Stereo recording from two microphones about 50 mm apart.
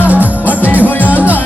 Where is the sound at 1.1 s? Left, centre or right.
Right.